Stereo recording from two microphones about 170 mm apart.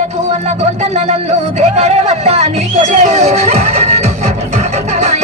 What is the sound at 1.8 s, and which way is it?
Music, 40° right (ahead or behind).